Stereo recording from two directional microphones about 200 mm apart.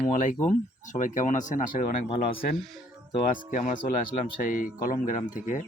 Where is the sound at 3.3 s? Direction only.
40° left (ahead or behind).